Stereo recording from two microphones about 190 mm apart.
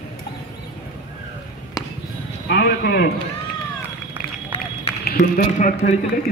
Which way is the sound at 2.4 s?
60° left (ahead or behind).